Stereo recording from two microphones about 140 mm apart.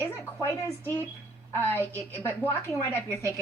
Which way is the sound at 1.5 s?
15° left (ahead or behind).